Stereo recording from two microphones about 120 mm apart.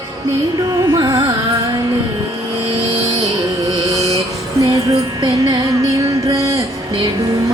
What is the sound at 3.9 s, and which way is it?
Mantra, 30° right (ahead or behind).